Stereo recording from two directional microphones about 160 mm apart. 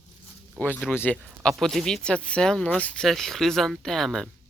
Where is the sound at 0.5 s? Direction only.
10° left (ahead or behind).